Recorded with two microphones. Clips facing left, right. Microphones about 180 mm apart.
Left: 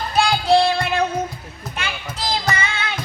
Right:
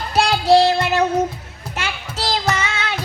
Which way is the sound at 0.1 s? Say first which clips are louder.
Right 2 dB; 75° right (ahead or behind).